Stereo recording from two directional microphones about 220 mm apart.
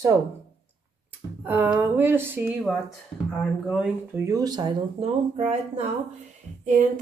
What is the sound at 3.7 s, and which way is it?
Speech, centre (ahead or behind).